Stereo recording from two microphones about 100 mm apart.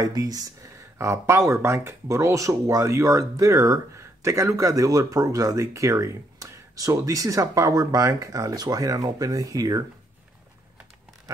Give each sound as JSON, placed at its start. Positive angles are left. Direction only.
{"t": 0.0, "sound": "speech", "side_deg": -40}